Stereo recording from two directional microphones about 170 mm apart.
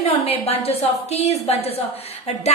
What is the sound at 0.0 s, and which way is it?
A woman's voice, 35° left (ahead or behind).